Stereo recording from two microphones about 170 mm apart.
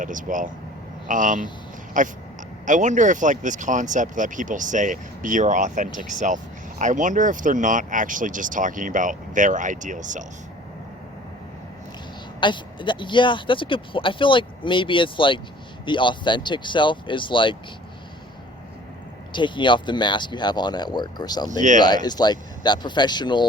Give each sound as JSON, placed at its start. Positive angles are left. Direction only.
{"t": 0.0, "sound": "speech", "side_deg": -50}
{"t": 12.4, "sound": "speech", "side_deg": 30}
{"t": 19.3, "sound": "speech", "side_deg": 30}